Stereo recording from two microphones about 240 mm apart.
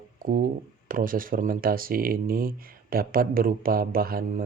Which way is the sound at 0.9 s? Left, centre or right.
Right.